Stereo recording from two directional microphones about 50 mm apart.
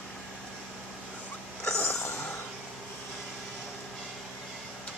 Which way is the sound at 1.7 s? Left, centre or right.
Left.